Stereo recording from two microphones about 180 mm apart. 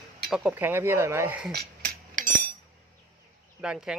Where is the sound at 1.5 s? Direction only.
55° right (ahead or behind).